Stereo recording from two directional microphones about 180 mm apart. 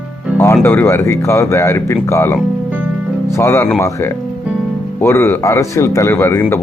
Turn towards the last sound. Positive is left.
turn(degrees=10)  # may be behind; listen again after turning